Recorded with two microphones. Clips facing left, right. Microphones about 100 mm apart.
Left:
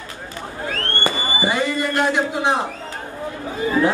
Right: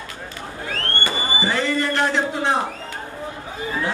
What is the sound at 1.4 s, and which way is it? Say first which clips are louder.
A man's voice: left 1 dB; 10° left (ahead or behind).